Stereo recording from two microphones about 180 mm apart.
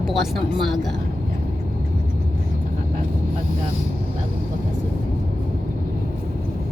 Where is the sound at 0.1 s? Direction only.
Centre (ahead or behind).